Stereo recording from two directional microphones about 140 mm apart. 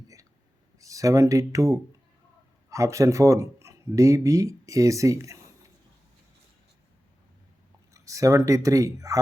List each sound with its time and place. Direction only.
0.8 s speech: 25° right (ahead or behind)
7.9 s speech: 25° right (ahead or behind)